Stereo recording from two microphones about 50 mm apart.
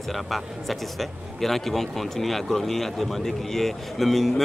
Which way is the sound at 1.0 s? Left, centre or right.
Centre.